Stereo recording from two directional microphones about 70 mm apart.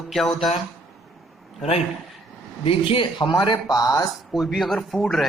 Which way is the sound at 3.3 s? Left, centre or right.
Left.